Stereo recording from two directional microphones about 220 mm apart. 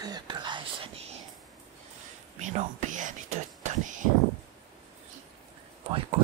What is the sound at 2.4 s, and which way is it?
Whispering, 35° right (ahead or behind).